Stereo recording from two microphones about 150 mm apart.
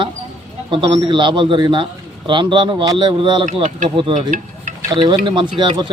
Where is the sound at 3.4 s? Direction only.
55° right (ahead or behind).